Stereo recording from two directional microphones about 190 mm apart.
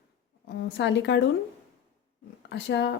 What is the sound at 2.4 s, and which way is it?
Speech, 65° left (ahead or behind).